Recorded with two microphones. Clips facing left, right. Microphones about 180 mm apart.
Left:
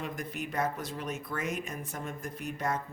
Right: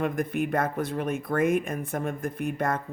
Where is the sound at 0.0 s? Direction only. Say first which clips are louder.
Right 10 dB; 55° right (ahead or behind).